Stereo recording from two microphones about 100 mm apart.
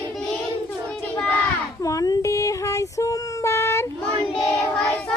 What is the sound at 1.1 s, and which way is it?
Speech, 10° left (ahead or behind).